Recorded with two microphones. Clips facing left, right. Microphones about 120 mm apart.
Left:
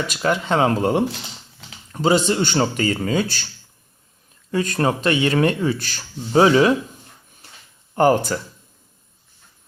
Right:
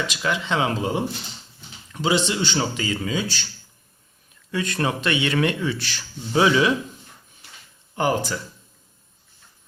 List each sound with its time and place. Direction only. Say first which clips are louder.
0.1 s speech: left 4 dB; 45° left (ahead or behind)
1.9 s speech: left 4 dB; 45° left (ahead or behind)
4.5 s speech: left 4 dB; 40° left (ahead or behind)
7.4 s a sound: left 1 dB; 40° left (ahead or behind)
7.9 s speech: left 6 dB; 50° left (ahead or behind)